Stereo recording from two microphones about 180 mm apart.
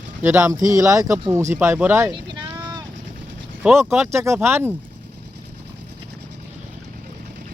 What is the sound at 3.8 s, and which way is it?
Speech, 15° right (ahead or behind).